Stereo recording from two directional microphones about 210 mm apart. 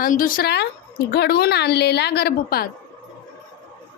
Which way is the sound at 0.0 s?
40° left (ahead or behind).